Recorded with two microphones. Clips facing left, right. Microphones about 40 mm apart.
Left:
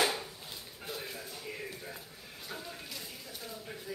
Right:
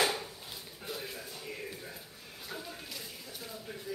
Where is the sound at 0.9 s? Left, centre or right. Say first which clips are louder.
Even; centre.